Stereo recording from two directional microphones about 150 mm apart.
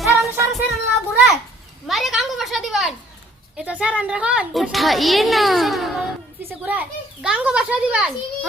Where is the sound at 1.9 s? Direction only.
Centre (ahead or behind).